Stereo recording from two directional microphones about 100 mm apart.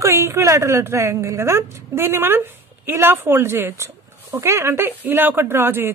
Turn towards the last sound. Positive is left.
turn(degrees=-25)  # may be behind; listen again after turning